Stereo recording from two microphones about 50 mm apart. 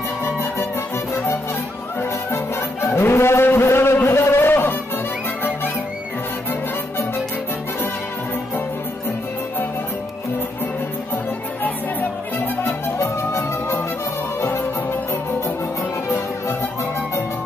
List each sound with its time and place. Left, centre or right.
2.0 s music: left
13.0 s music: left
14.4 s music: left